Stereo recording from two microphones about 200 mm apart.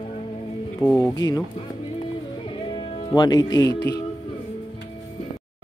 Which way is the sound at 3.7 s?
55° left (ahead or behind).